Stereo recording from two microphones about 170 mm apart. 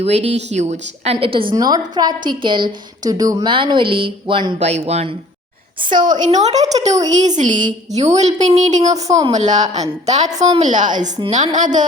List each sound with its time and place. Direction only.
0.0 s a woman's voice: 40° right (ahead or behind)
4.6 s speech: 40° right (ahead or behind)
5.8 s a woman's voice: 50° right (ahead or behind)